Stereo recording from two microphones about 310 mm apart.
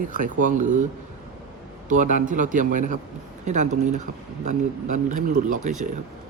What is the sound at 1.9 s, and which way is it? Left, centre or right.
Speech, right.